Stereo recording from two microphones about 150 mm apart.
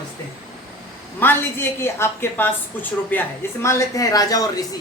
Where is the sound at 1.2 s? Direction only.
15° left (ahead or behind).